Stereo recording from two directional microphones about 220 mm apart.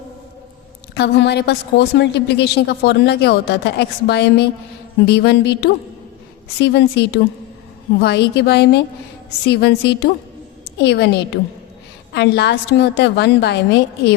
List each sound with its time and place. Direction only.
0.9 s a woman's voice: 50° left (ahead or behind)
12.1 s a woman's voice: 50° left (ahead or behind)